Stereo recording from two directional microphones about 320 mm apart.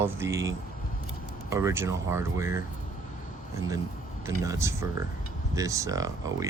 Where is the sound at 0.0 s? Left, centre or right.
Centre.